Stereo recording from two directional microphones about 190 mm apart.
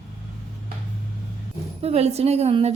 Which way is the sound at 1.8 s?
35° right (ahead or behind).